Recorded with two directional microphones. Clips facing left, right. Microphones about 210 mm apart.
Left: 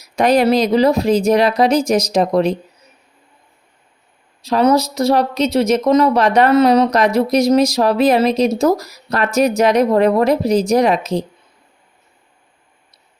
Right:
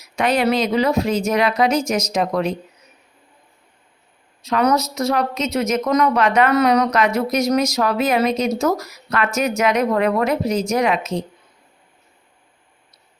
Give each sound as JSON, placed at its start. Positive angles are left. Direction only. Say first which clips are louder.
{"t": 0.0, "sound": "speech", "louder": "left 5 dB", "side_deg": 35}
{"t": 4.4, "sound": "speech", "louder": "left 4 dB", "side_deg": 30}